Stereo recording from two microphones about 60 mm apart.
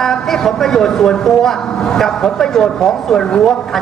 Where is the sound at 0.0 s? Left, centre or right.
Centre.